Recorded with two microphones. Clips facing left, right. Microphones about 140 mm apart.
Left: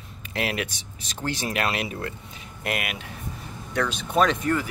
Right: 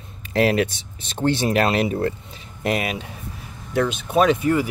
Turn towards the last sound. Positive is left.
turn(degrees=-10)  # may be behind; listen again after turning